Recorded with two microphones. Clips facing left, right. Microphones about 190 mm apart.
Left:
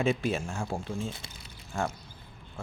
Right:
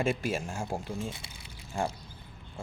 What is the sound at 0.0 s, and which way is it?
A man's voice, 5° right (ahead or behind).